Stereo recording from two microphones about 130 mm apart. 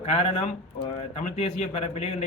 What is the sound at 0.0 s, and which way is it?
Speech, 50° left (ahead or behind).